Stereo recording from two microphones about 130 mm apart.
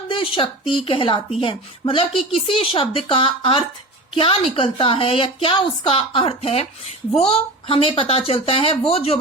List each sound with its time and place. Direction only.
0.1 s a woman's voice: 40° left (ahead or behind)